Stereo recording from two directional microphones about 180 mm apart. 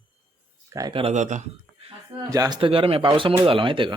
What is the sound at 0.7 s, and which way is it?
Speech, 20° right (ahead or behind).